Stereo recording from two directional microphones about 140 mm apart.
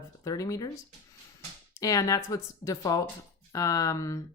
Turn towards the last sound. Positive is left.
turn(degrees=25)  # may be behind; listen again after turning